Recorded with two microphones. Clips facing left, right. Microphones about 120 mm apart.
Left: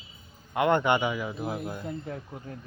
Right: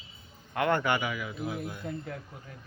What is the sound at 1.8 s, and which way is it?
Speech, 20° left (ahead or behind).